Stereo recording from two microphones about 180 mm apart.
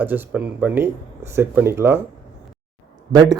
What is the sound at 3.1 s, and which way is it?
Speech, 20° right (ahead or behind).